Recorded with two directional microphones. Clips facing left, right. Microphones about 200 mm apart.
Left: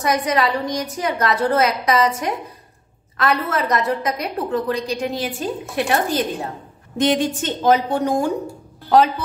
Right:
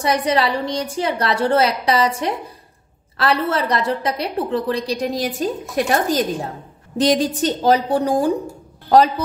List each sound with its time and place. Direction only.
0.0 s a woman's voice: 30° right (ahead or behind)